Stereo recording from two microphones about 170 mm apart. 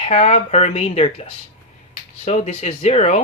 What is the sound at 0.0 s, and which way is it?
Speech, 40° left (ahead or behind).